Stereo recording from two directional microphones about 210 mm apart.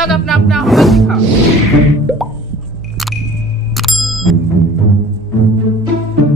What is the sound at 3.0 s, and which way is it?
Music, centre (ahead or behind).